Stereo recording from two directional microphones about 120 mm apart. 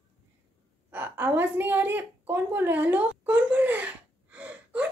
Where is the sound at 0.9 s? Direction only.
15° right (ahead or behind).